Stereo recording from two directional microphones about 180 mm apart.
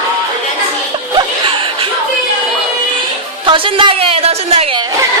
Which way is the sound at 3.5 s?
30° right (ahead or behind).